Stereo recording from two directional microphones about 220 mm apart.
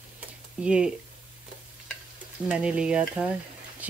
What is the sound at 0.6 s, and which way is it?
Speech, 5° right (ahead or behind).